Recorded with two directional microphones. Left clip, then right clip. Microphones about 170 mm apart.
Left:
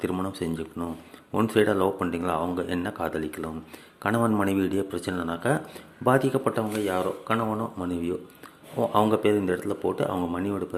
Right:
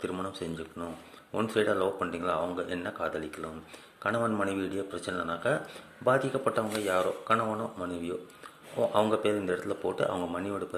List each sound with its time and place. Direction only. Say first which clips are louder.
0.0 s speech: left 5 dB; 15° left (ahead or behind)